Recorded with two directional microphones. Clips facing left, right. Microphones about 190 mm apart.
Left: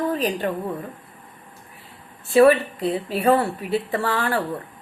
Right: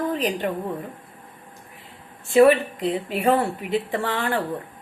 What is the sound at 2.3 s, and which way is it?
Speech, 15° right (ahead or behind).